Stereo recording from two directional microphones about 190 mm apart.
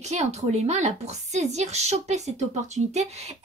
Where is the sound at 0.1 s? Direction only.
35° right (ahead or behind).